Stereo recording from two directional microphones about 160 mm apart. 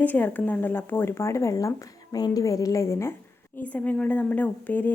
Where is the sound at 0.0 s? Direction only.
10° left (ahead or behind).